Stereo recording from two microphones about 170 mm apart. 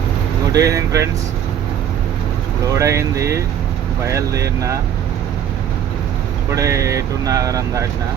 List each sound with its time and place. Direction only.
0.5 s speech: 20° right (ahead or behind)
2.7 s speech: 15° right (ahead or behind)
6.5 s speech: 20° right (ahead or behind)